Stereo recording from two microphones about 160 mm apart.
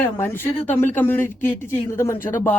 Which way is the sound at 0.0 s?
10° left (ahead or behind).